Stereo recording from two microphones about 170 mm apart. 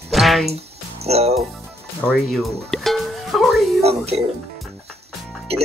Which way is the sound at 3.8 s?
35° right (ahead or behind).